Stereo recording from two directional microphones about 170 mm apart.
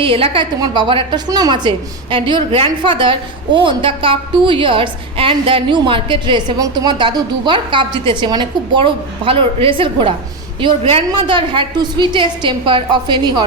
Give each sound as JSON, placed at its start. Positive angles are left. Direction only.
{"t": 0.0, "sound": "a woman's voice", "side_deg": -30}